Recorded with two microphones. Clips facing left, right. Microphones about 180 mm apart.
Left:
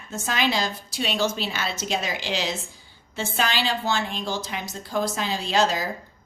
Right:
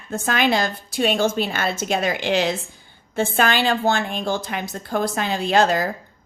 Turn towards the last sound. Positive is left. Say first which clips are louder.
# right 5 dB
turn(degrees=-55)  # may be behind; listen again after turning